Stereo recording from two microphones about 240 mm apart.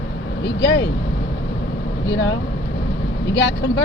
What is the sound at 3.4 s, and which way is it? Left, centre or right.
Speech, left.